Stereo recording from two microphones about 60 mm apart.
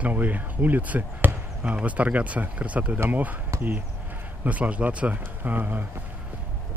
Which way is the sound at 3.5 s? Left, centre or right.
Right.